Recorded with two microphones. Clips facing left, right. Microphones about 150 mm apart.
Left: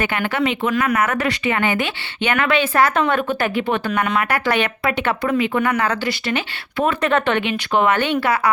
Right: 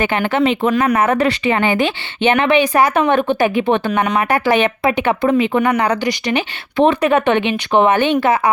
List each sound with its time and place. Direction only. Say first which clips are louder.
0.0 s speech: right 5 dB; 25° right (ahead or behind)